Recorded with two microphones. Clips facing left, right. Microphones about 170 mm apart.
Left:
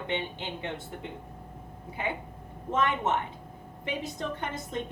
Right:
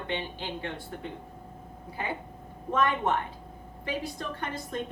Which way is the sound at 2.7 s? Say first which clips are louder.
Right 1 dB; 20° left (ahead or behind).